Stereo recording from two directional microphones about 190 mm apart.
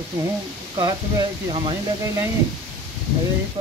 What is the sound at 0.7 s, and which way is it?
Speech, 20° right (ahead or behind).